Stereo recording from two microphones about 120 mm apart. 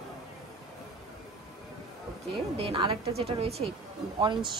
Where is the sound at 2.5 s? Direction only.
50° right (ahead or behind).